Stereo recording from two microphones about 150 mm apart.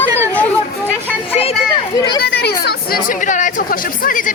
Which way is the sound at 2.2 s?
90° left.